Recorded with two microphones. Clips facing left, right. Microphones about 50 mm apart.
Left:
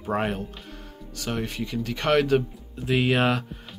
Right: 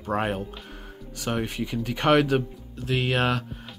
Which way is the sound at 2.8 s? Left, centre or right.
Centre.